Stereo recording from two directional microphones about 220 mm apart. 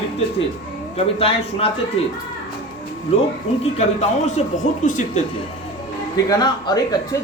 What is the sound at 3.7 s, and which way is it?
Speech, 30° left (ahead or behind).